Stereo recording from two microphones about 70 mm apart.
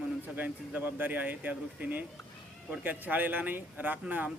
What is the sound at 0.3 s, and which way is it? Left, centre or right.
A man's voice, right.